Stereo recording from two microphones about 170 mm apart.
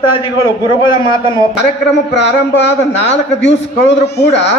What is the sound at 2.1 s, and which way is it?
A man's voice, 90° left.